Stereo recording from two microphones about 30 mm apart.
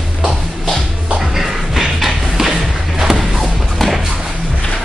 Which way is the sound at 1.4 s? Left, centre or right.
Centre.